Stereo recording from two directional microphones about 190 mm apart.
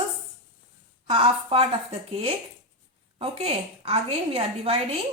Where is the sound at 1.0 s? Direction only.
30° right (ahead or behind).